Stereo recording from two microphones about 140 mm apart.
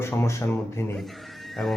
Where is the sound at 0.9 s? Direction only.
Centre (ahead or behind).